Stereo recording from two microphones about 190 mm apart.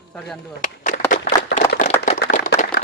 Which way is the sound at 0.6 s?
45° left (ahead or behind).